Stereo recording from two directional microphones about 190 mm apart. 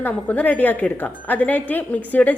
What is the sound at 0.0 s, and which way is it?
A woman's voice, 10° left (ahead or behind).